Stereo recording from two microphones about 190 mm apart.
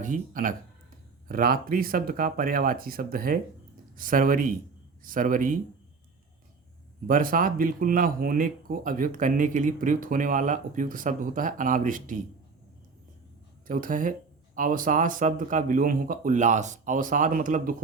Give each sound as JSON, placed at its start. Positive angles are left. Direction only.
{"t": 0.0, "sound": "speech", "side_deg": -45}
{"t": 7.1, "sound": "speech", "side_deg": -45}
{"t": 13.7, "sound": "speech", "side_deg": -45}